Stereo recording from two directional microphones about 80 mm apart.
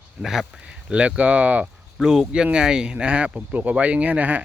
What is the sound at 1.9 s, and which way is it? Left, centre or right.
Speech, centre.